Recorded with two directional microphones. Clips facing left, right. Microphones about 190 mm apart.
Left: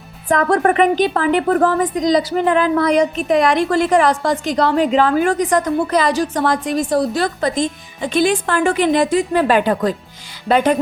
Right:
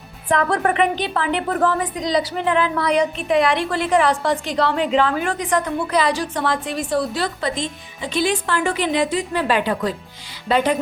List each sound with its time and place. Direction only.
0.3 s a woman's voice: 45° left (ahead or behind)